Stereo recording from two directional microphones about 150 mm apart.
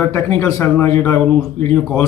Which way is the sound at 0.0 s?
15° left (ahead or behind).